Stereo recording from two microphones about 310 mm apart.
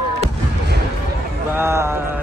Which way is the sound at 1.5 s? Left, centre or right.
Centre.